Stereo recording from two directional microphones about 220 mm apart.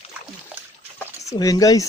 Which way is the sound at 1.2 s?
15° left (ahead or behind).